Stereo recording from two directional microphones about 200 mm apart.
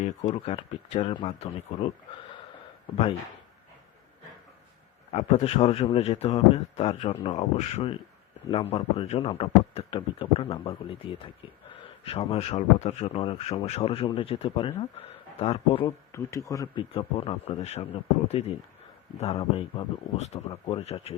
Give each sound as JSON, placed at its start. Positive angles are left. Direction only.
{"t": 0.0, "sound": "a man's voice", "side_deg": 30}
{"t": 5.1, "sound": "a man's voice", "side_deg": 30}
{"t": 16.1, "sound": "a man's voice", "side_deg": 15}